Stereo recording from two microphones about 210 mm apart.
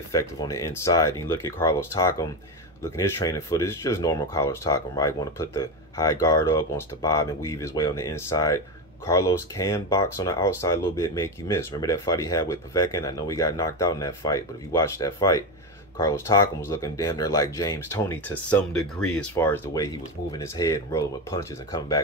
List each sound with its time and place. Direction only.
0.1 s speech: 15° left (ahead or behind)